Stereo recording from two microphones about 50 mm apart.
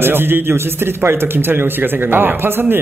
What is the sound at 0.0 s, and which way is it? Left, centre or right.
A man's voice, right.